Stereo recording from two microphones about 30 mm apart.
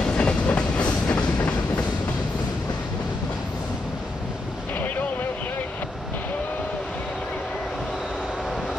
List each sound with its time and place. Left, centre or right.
0.1 s train: left
4.7 s boat: left